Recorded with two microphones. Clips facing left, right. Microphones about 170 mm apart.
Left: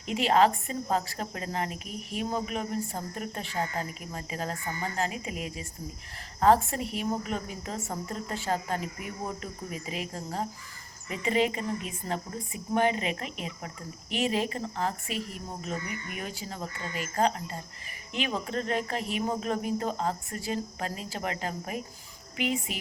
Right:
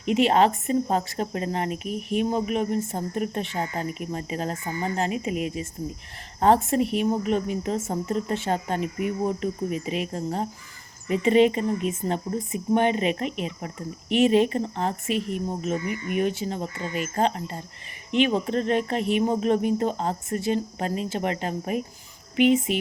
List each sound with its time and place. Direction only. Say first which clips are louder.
0.0 s a woman's voice: right 4 dB; 20° right (ahead or behind)